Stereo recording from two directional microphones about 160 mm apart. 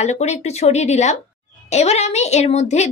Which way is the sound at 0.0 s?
45° left (ahead or behind).